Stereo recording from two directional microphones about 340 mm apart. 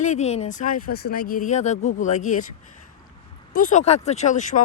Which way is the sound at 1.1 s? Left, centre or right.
Left.